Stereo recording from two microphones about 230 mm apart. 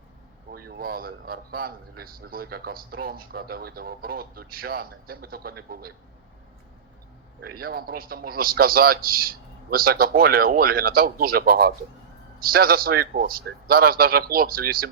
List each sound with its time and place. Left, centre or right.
0.5 s a man's voice: right
7.5 s a man's voice: right